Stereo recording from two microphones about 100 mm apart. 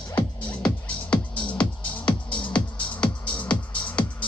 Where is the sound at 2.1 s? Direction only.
10° left (ahead or behind).